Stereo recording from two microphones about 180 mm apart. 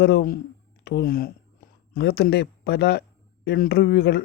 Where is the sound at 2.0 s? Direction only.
65° left (ahead or behind).